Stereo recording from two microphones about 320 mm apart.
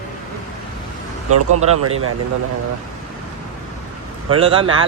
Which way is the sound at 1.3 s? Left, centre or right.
Right.